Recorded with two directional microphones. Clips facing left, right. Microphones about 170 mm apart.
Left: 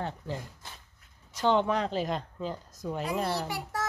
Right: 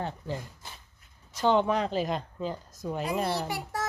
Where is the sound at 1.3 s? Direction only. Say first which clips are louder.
Right 1 dB; 10° right (ahead or behind).